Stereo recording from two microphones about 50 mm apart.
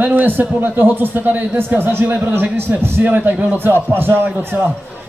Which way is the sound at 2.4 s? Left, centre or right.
Right.